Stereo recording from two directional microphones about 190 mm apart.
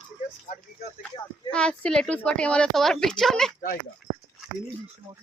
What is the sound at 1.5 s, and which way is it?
A woman's voice, 5° left (ahead or behind).